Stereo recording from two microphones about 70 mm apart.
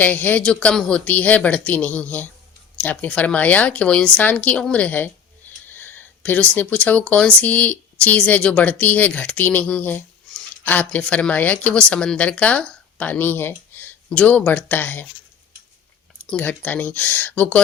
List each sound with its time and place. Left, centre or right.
0.0 s speech: left
0.4 s speech: centre
13.7 s a sound: left
14.1 s speech: centre
16.4 s speech: left